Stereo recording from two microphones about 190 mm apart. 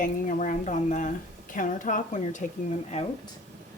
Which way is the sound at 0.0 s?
45° left (ahead or behind).